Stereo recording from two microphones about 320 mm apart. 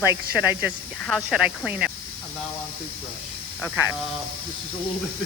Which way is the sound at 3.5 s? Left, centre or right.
Centre.